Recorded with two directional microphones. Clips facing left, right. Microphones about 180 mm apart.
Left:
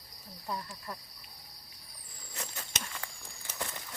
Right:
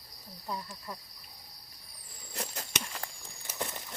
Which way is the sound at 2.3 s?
35° right (ahead or behind).